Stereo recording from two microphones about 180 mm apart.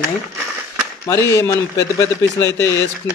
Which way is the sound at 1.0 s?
15° left (ahead or behind).